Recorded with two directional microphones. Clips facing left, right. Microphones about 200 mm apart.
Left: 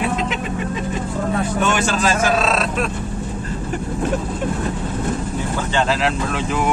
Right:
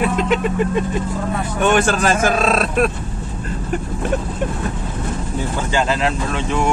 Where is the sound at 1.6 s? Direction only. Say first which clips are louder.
Right 7 dB; 55° right (ahead or behind).